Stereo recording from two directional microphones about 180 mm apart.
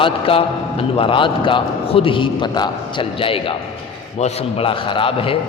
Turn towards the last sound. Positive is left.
turn(degrees=30)  # may be behind; listen again after turning